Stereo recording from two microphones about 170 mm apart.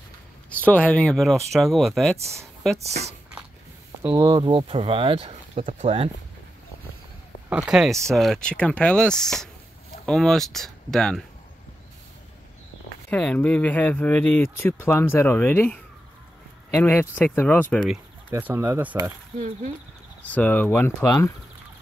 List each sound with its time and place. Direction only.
0.6 s speech: 10° left (ahead or behind)
2.8 s speech: 40° right (ahead or behind)
4.0 s speech: 10° right (ahead or behind)
4.3 s speech: 30° right (ahead or behind)
7.4 s speech: 5° right (ahead or behind)
13.1 s speech: 10° left (ahead or behind)
18.3 s speech: 15° right (ahead or behind)
20.2 s speech: 10° left (ahead or behind)